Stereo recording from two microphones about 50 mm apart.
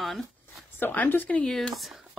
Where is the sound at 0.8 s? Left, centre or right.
Left.